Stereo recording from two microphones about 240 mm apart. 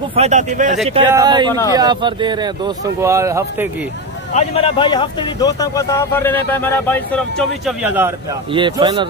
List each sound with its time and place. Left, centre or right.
0.1 s speech: right
1.0 s speech: centre
4.3 s speech: left; by 8.1 s centre
8.5 s speech: centre